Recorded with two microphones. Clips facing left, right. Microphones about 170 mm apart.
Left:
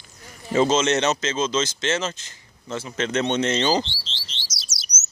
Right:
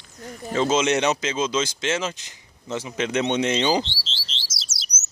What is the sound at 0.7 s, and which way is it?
Speech, 15° right (ahead or behind).